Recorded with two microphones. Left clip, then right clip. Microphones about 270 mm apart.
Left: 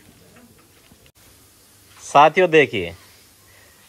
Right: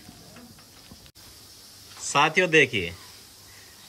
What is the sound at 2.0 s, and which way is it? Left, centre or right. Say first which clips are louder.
Speech: left 8 dB; centre.